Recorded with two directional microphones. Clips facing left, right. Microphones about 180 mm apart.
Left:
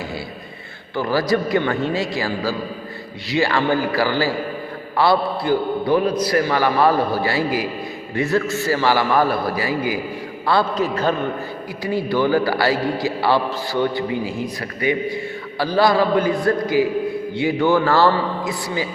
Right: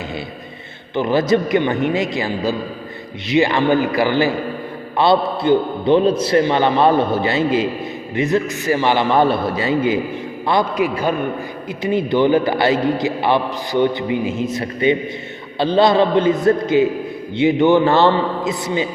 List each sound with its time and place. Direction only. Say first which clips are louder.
0.9 s a man's voice: right 3 dB; 20° right (ahead or behind)